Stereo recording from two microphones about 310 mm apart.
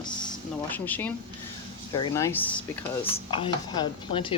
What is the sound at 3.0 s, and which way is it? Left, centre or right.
Speech, centre.